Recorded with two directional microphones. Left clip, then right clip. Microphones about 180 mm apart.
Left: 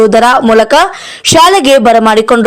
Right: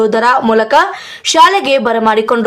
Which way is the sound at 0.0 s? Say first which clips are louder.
Left 5 dB; 40° left (ahead or behind).